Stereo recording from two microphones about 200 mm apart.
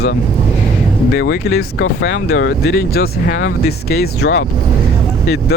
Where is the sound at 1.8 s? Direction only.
70° left (ahead or behind).